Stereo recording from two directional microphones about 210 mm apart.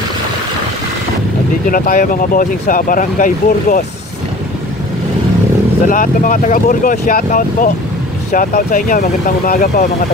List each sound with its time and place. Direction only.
1.7 s speech: 40° left (ahead or behind)
5.9 s speech: 40° left (ahead or behind)